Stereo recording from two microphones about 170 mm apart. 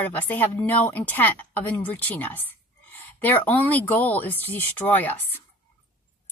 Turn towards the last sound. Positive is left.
turn(degrees=10)  # may be behind; listen again after turning